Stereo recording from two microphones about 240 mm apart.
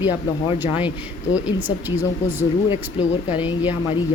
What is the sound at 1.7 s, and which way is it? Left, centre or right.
Speech, centre.